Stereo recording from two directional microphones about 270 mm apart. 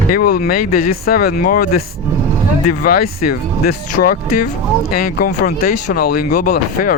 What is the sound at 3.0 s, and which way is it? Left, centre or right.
Speech, left.